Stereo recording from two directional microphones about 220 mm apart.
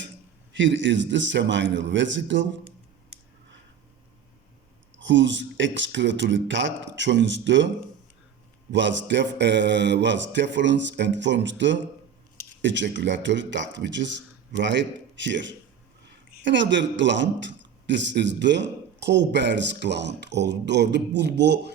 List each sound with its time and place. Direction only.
0.5 s a man's voice: 55° right (ahead or behind)
4.9 s a man's voice: 55° right (ahead or behind)
8.7 s a man's voice: 55° right (ahead or behind)